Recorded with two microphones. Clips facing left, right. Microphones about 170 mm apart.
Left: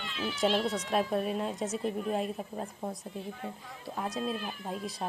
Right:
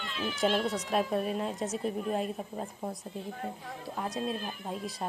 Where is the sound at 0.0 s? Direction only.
50° right (ahead or behind).